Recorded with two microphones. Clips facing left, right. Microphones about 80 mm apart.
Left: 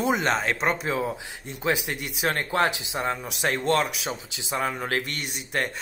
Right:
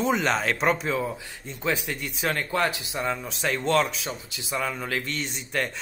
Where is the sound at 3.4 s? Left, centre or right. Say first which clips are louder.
Left 1 dB; left.